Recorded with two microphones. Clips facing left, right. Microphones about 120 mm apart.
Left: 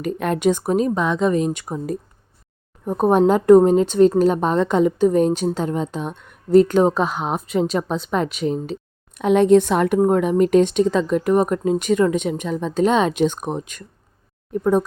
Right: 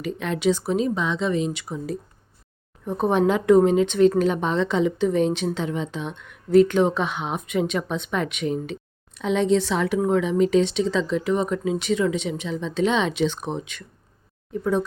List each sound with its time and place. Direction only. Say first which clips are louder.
0.0 s speech: left 4 dB; 50° left (ahead or behind); by 8.8 s 35° left (ahead or behind)
9.1 s speech: left 7 dB; 55° left (ahead or behind)